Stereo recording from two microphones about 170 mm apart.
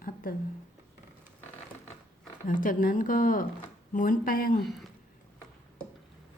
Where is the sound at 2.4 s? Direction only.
50° left (ahead or behind).